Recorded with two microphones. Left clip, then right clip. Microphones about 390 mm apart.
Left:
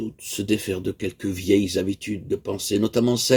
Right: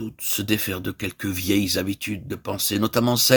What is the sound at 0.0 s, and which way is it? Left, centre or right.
Speech, right.